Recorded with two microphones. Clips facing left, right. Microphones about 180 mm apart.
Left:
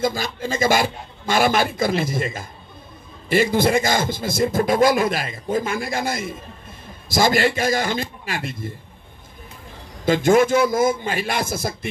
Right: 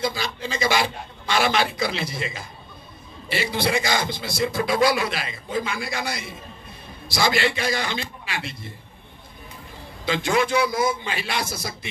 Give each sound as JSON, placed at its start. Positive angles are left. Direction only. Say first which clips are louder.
{"t": 0.0, "sound": "speech", "louder": "left 4 dB", "side_deg": 50}
{"t": 10.0, "sound": "speech", "louder": "left 7 dB", "side_deg": 45}